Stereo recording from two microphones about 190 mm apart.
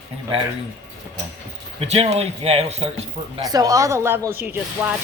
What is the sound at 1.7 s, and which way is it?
Speech, 30° right (ahead or behind).